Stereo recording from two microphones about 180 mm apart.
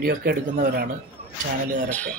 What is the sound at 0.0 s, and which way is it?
Speech, 55° right (ahead or behind).